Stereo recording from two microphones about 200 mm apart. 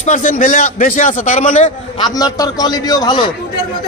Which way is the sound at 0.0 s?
40° left (ahead or behind).